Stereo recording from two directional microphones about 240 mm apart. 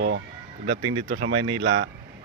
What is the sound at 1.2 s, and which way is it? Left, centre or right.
Speech, right.